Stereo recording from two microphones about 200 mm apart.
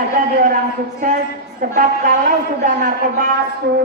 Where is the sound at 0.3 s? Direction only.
40° right (ahead or behind).